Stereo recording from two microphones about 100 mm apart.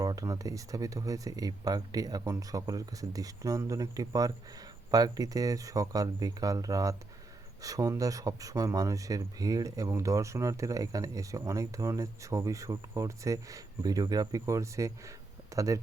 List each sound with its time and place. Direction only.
0.0 s speech: 40° right (ahead or behind)